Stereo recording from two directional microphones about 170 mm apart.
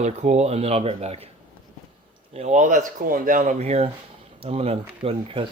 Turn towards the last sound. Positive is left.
turn(degrees=-35)  # may be behind; listen again after turning